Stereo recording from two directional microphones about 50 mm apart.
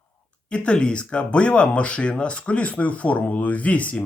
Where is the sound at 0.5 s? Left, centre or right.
Left.